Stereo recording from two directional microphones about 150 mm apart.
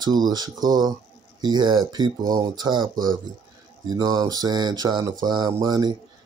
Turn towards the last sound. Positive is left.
turn(degrees=-25)  # may be behind; listen again after turning